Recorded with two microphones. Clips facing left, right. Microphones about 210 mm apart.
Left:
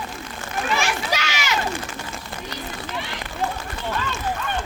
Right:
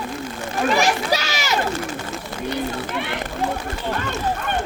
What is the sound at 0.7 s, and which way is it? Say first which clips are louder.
Children playing: right 4 dB; 40° right (ahead or behind).